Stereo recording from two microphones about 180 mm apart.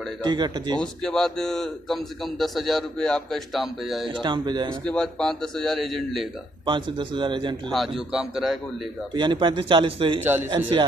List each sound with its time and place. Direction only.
0.2 s speech: 25° right (ahead or behind)
0.7 s speech: 5° left (ahead or behind)
4.2 s speech: 25° right (ahead or behind)
4.8 s speech: 5° left (ahead or behind)
6.6 s speech: 25° right (ahead or behind)
7.7 s speech: centre (ahead or behind)
9.1 s speech: 25° right (ahead or behind)